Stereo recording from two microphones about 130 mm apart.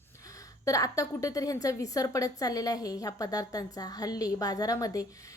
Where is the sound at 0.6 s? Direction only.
25° left (ahead or behind).